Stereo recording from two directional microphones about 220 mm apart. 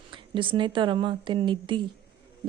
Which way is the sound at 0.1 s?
20° right (ahead or behind).